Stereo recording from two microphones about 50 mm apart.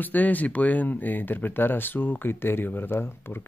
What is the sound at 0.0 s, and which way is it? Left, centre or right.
Speech, left.